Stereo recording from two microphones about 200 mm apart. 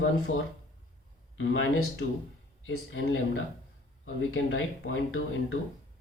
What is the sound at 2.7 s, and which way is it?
Speech, 85° left.